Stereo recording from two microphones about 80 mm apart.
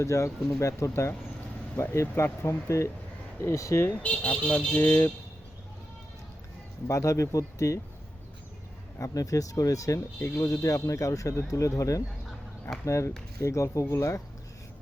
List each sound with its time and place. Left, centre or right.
0.0 s speech: left
3.8 s speech: centre
6.8 s speech: left
9.0 s speech: left
10.2 s speech: left
10.4 s speech: left